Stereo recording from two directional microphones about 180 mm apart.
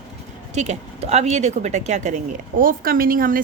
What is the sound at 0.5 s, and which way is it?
A woman's voice, 40° right (ahead or behind).